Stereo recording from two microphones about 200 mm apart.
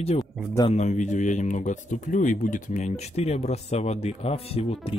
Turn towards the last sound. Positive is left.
turn(degrees=30)  # may be behind; listen again after turning